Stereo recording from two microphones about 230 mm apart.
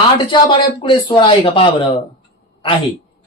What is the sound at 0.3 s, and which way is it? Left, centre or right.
Speech, left.